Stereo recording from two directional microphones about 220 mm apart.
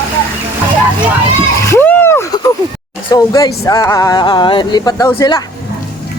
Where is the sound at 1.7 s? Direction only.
10° left (ahead or behind).